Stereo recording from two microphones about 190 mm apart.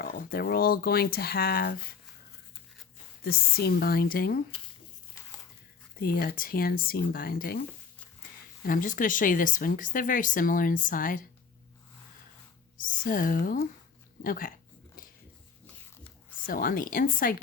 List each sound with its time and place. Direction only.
0.0 s speech: 50° left (ahead or behind)
3.2 s speech: 55° left (ahead or behind)
6.0 s speech: 50° left (ahead or behind)
8.6 s speech: 45° left (ahead or behind)
12.7 s speech: 45° left (ahead or behind)
16.5 s speech: 45° left (ahead or behind)